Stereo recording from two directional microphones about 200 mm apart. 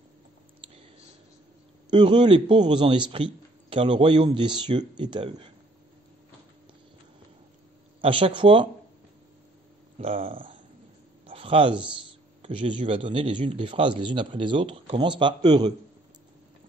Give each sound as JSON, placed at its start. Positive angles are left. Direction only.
{"t": 1.9, "sound": "a man's voice", "side_deg": -20}
{"t": 8.0, "sound": "a man's voice", "side_deg": -25}
{"t": 9.9, "sound": "a man's voice", "side_deg": -30}